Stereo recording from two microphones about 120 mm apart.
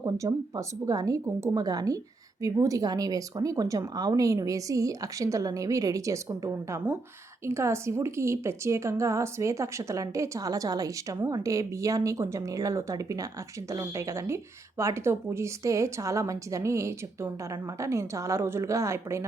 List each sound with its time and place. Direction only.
0.0 s speech: 30° right (ahead or behind)